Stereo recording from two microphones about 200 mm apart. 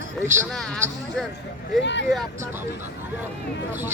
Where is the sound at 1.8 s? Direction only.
65° left (ahead or behind).